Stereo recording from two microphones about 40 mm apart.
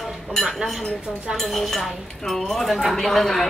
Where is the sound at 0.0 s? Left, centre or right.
Centre.